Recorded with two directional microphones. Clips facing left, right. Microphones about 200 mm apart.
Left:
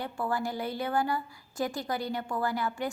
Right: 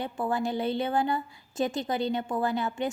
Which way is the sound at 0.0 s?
20° right (ahead or behind).